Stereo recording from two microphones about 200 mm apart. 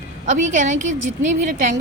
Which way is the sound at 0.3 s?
40° right (ahead or behind).